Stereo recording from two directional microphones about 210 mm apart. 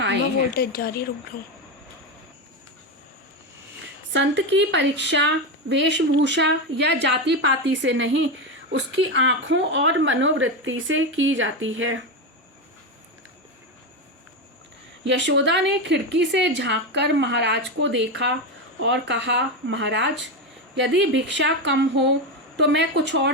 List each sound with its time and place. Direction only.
0.5 s a woman's voice: 50° left (ahead or behind)
4.1 s speech: 55° right (ahead or behind)
15.0 s speech: 60° right (ahead or behind)